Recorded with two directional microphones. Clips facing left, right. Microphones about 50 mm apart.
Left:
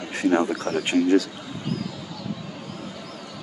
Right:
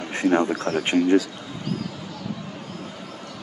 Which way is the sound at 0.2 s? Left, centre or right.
Centre.